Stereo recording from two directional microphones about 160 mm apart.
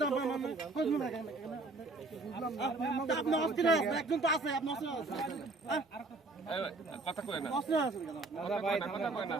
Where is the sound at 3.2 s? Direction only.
Centre (ahead or behind).